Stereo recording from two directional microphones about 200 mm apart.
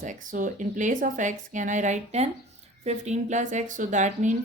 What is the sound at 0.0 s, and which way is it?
Speech, 40° right (ahead or behind).